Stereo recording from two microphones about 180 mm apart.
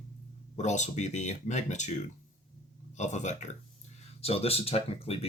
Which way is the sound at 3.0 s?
40° left (ahead or behind).